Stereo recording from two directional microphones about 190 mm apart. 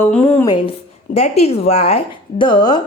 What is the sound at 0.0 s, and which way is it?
Speech, 10° left (ahead or behind).